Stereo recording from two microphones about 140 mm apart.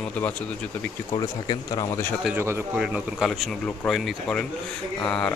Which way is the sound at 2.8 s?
Centre (ahead or behind).